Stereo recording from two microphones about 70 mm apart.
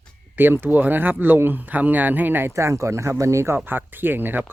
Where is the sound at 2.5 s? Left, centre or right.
Right.